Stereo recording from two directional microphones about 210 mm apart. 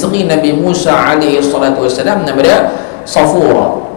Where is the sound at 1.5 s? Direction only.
15° left (ahead or behind).